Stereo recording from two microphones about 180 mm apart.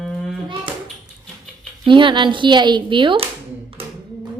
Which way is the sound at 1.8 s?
25° right (ahead or behind).